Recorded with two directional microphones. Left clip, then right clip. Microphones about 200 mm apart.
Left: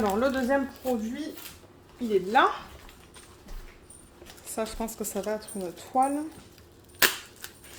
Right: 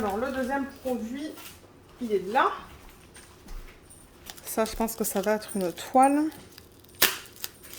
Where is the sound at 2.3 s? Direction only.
65° left (ahead or behind).